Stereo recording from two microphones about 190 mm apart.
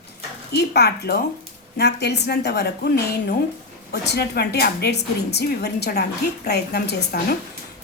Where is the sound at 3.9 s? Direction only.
55° left (ahead or behind).